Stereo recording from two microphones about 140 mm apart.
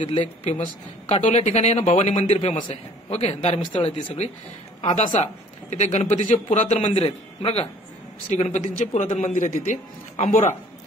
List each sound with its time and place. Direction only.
0.0 s a man's voice: 45° left (ahead or behind)
5.2 s a man's voice: 55° left (ahead or behind)
6.9 s a man's voice: 40° left (ahead or behind)
8.3 s a man's voice: 55° left (ahead or behind)